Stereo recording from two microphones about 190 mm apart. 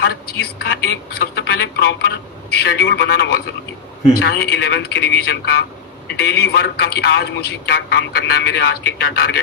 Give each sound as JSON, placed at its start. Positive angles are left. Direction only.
{"t": 0.0, "sound": "a man's voice", "side_deg": 55}